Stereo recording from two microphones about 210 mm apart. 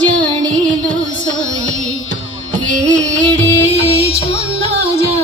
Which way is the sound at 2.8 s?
5° left (ahead or behind).